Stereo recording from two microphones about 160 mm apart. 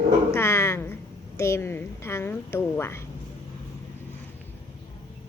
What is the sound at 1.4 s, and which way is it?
A woman's voice, 15° left (ahead or behind).